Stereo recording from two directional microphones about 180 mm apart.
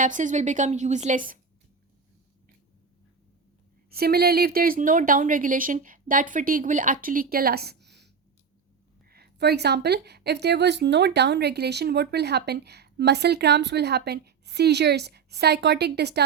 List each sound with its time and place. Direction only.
0.0 s speech: 45° right (ahead or behind)
3.8 s speech: 60° right (ahead or behind)